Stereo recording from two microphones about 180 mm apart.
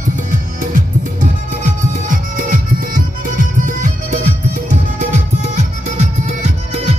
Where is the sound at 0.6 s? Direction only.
45° right (ahead or behind).